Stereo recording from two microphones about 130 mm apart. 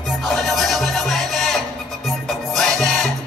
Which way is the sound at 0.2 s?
Centre (ahead or behind).